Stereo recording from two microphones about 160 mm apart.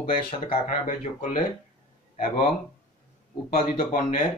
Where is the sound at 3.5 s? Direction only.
50° left (ahead or behind).